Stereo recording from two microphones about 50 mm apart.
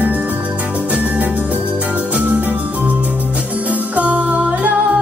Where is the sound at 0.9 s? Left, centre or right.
Right.